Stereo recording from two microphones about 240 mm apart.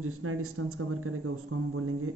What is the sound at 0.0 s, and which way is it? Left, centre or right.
A man's voice, right.